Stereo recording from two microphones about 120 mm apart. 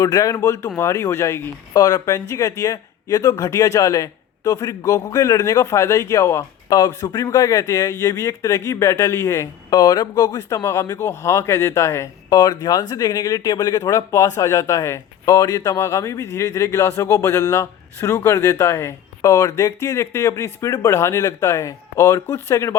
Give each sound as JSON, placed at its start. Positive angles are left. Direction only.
{"t": 0.0, "sound": "speech", "side_deg": 30}
{"t": 12.4, "sound": "speech", "side_deg": 35}